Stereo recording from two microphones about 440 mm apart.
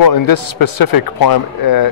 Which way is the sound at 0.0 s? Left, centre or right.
Left.